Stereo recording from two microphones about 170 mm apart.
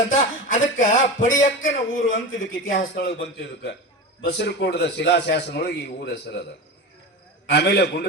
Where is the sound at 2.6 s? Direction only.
75° left (ahead or behind).